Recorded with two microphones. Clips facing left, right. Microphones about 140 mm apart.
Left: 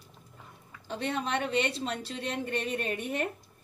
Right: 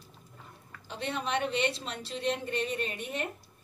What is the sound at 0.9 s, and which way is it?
A woman's voice, 50° left (ahead or behind).